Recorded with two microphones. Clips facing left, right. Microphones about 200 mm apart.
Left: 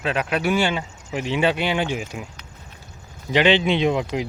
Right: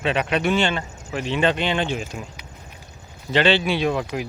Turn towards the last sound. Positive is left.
turn(degrees=20)  # may be behind; listen again after turning